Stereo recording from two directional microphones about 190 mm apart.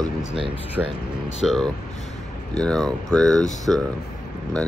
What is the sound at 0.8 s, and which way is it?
Speech, 10° right (ahead or behind).